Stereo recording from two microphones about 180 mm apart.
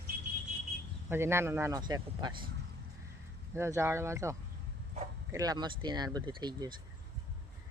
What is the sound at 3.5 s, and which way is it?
Speech, 15° right (ahead or behind).